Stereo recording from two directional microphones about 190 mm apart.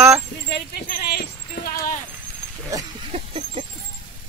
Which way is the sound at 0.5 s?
55° left (ahead or behind).